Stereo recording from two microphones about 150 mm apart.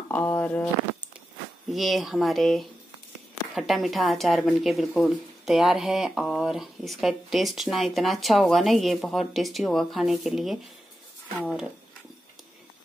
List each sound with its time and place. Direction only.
0.1 s speech: 10° left (ahead or behind)
1.7 s a woman's voice: centre (ahead or behind)